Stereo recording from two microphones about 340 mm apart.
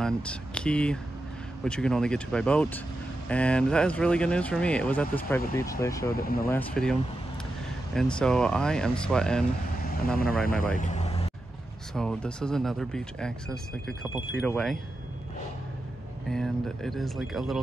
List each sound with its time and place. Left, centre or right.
0.0 s speech: centre
6.1 s speech: left
6.5 s speech: centre
10.4 s speech: left
11.9 s speech: centre
14.4 s speech: centre
16.3 s speech: centre